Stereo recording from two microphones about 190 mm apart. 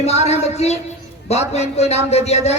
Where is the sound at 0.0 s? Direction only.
35° left (ahead or behind).